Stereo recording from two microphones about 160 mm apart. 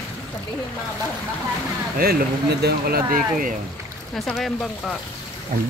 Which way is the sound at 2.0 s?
80° right.